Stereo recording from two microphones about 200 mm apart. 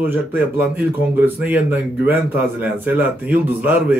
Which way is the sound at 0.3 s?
10° right (ahead or behind).